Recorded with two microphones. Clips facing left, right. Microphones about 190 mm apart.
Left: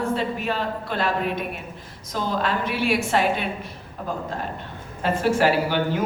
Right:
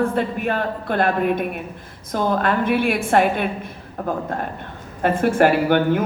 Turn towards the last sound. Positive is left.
turn(degrees=-55)  # may be behind; listen again after turning